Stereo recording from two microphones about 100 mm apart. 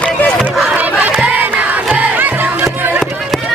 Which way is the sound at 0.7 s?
15° right (ahead or behind).